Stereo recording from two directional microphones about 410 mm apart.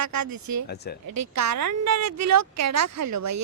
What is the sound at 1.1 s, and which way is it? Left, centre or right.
A woman's voice, right.